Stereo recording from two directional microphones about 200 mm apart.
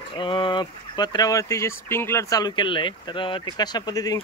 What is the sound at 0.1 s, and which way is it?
Speech, 25° left (ahead or behind).